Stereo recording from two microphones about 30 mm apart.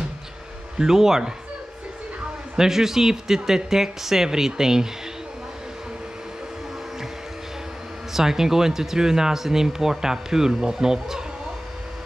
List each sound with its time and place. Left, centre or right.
0.7 s speech: centre
2.5 s speech: centre
8.1 s speech: centre